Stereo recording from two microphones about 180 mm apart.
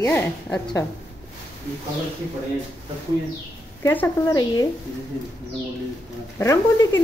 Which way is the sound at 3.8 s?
10° left (ahead or behind).